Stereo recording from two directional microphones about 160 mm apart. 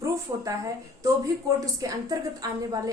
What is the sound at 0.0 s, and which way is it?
A woman's voice, 20° right (ahead or behind).